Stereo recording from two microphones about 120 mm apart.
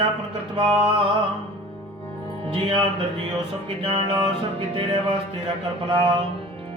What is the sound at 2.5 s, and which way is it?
Music, 45° right (ahead or behind).